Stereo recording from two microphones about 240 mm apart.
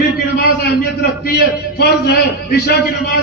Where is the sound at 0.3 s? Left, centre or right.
Left.